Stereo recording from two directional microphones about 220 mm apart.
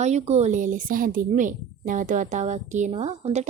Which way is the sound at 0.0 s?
30° right (ahead or behind).